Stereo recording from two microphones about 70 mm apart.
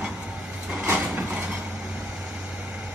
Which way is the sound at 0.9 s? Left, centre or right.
Centre.